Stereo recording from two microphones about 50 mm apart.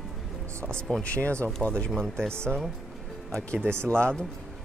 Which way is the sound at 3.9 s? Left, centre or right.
Centre.